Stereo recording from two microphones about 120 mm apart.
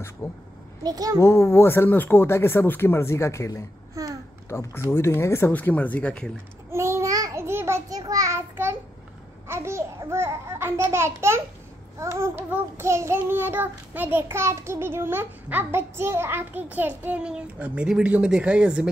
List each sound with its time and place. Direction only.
0.2 s speech: 25° left (ahead or behind)
0.8 s a child's voice: 30° right (ahead or behind)
1.2 s speech: 25° left (ahead or behind)
3.9 s babbling: 30° right (ahead or behind)
4.5 s speech: 20° left (ahead or behind)
6.7 s child singing: 20° right (ahead or behind)
9.5 s a child's voice: 20° right (ahead or behind)
12.0 s child singing: 25° right (ahead or behind)